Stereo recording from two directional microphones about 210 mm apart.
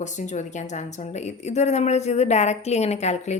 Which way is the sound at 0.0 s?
35° left (ahead or behind).